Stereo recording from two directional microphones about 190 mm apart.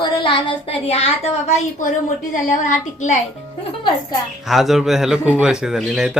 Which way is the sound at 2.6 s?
40° left (ahead or behind).